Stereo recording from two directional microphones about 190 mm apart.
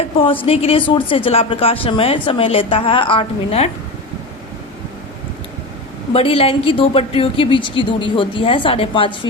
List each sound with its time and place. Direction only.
0.0 s speech: 30° left (ahead or behind)
6.1 s speech: 30° left (ahead or behind)